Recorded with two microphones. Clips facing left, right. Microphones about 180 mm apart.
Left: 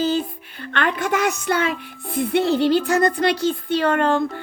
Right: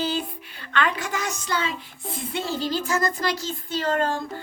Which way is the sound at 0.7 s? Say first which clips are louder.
Left 4 dB; 60° left (ahead or behind).